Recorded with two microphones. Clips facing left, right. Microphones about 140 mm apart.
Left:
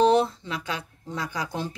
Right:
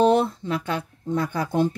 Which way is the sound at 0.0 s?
55° right (ahead or behind).